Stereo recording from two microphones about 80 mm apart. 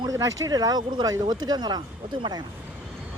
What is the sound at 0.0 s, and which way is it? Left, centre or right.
Speech, right.